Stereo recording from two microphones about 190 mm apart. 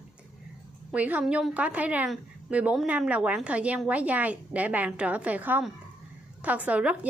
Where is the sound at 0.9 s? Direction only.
5° right (ahead or behind).